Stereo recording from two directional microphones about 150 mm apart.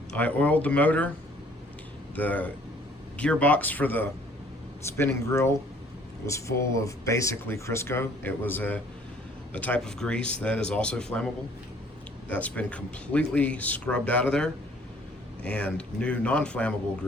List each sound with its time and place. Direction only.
0.2 s speech: 10° left (ahead or behind)
2.1 s speech: 10° left (ahead or behind)
12.3 s speech: 10° left (ahead or behind)